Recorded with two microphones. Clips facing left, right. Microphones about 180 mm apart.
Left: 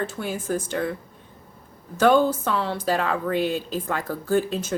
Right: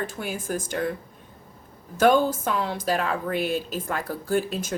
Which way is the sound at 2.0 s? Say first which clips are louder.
Left 1 dB; 15° right (ahead or behind).